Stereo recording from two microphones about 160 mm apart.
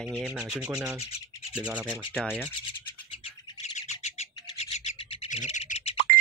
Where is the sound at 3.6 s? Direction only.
45° left (ahead or behind).